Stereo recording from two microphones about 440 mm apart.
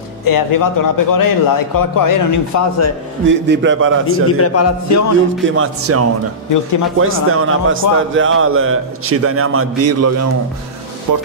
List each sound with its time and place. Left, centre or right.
0.2 s a man's voice: left
3.3 s a man's voice: right
4.4 s a man's voice: left
5.4 s a man's voice: right
6.5 s a man's voice: left
7.0 s a man's voice: right